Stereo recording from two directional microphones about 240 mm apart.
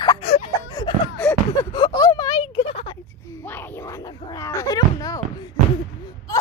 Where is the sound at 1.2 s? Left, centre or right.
Centre.